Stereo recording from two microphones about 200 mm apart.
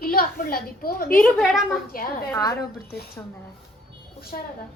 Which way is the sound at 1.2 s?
Centre (ahead or behind).